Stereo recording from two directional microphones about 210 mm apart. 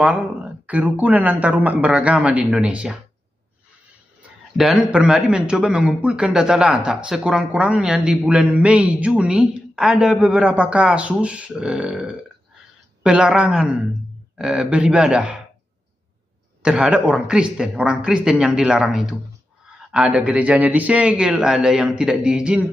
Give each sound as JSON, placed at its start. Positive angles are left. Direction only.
{"t": 0.0, "sound": "speech", "side_deg": -5}
{"t": 4.6, "sound": "a woman's voice", "side_deg": -5}
{"t": 16.6, "sound": "a woman's voice", "side_deg": -5}